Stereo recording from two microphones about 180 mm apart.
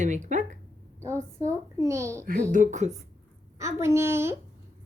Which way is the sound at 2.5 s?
45° right (ahead or behind).